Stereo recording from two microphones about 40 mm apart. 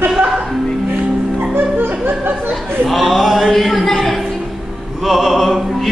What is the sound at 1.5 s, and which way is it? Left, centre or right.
Music, right.